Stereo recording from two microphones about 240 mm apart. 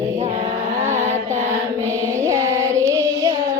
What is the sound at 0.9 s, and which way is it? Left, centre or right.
Mantra, right.